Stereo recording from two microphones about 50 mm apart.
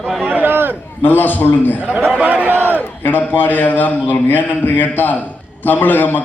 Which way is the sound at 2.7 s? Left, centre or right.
Left.